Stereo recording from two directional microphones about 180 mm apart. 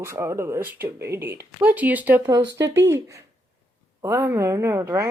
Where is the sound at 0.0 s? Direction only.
15° right (ahead or behind).